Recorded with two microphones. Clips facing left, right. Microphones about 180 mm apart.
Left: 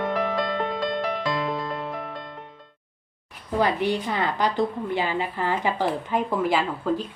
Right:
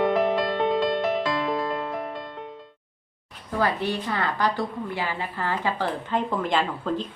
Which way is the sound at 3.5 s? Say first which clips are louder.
Left 2 dB; 15° left (ahead or behind).